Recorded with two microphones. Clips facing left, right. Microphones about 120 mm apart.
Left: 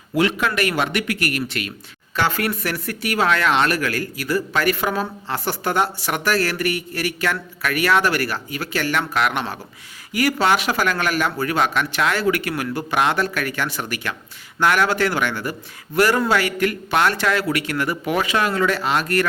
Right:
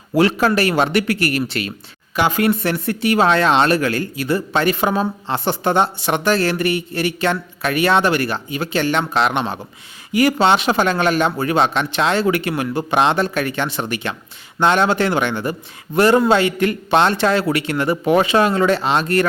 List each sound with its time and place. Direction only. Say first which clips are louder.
0.1 s speech: right 5 dB; 35° right (ahead or behind)
2.1 s speech: right 5 dB; 15° right (ahead or behind)